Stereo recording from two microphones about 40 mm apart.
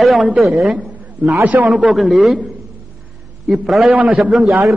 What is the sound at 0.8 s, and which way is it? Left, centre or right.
Speech, right.